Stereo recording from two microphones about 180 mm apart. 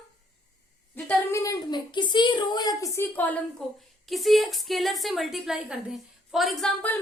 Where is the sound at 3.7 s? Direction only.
Centre (ahead or behind).